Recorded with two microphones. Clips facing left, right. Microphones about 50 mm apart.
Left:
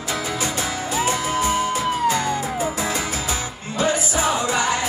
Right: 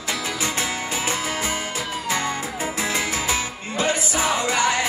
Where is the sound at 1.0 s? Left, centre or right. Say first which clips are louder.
Left 7 dB; right.